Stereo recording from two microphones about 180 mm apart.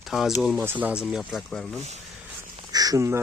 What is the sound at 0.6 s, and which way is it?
Speech, 10° right (ahead or behind).